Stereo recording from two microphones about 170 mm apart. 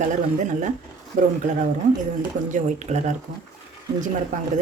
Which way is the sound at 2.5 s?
45° right (ahead or behind).